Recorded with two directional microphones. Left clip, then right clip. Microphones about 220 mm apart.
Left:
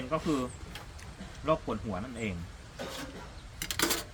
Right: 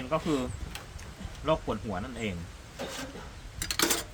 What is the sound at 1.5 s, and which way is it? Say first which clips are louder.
Speech: right 1 dB; 15° right (ahead or behind).